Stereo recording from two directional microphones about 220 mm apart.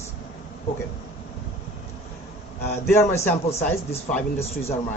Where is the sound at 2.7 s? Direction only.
10° left (ahead or behind).